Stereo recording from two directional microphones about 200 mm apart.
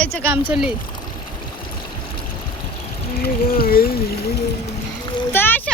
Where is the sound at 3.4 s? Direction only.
45° left (ahead or behind).